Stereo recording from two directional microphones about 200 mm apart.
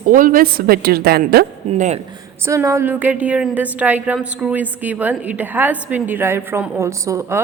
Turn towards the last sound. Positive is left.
turn(degrees=-15)  # may be behind; listen again after turning